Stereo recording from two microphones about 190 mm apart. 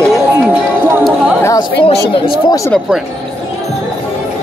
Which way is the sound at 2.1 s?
25° left (ahead or behind).